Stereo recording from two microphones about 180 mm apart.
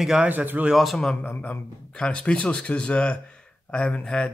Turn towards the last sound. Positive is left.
turn(degrees=5)  # may be behind; listen again after turning